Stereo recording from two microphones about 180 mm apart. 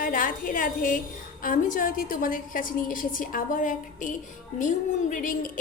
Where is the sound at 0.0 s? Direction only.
50° left (ahead or behind).